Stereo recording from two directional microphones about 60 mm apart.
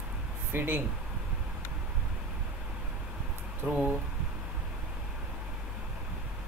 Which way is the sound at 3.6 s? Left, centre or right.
Right.